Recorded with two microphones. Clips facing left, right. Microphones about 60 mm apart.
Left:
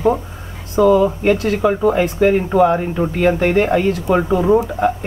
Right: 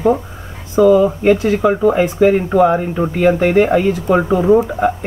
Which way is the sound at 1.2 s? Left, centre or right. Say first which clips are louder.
Right 3 dB; centre.